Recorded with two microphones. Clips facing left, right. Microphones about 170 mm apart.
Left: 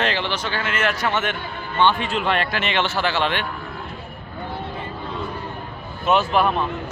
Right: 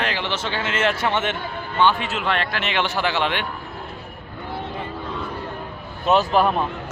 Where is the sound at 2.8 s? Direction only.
15° right (ahead or behind).